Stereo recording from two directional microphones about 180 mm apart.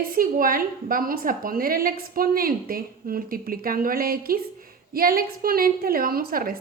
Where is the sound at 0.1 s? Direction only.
50° right (ahead or behind).